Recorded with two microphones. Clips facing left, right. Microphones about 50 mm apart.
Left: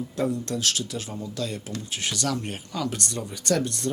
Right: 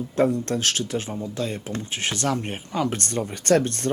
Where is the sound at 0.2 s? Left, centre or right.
Right.